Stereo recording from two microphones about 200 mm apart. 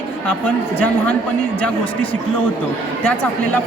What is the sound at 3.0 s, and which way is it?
Speech, 10° left (ahead or behind).